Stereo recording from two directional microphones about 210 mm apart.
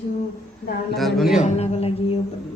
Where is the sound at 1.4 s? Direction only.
30° left (ahead or behind).